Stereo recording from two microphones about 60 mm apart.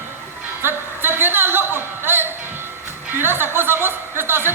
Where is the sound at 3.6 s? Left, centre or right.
Right.